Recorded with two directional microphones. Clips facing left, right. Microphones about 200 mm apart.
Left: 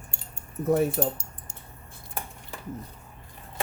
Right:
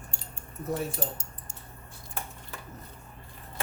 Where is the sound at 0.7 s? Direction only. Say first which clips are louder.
Left 9 dB; 55° left (ahead or behind).